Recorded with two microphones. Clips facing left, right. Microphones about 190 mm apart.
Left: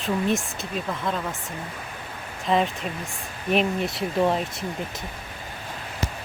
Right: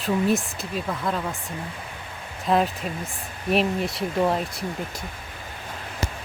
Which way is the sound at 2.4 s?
5° right (ahead or behind).